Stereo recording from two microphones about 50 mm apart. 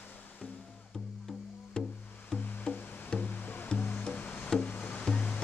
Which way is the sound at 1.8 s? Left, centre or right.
Centre.